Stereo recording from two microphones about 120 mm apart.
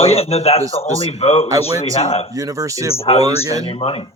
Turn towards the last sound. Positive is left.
turn(degrees=50)  # may be behind; listen again after turning